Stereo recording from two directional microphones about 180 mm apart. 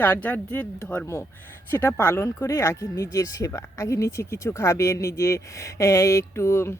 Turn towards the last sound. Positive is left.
turn(degrees=15)  # may be behind; listen again after turning